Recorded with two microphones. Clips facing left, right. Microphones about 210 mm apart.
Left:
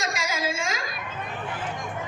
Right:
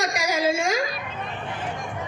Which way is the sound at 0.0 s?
65° right (ahead or behind).